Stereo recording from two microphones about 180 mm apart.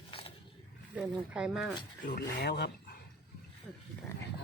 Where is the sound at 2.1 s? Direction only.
65° left (ahead or behind).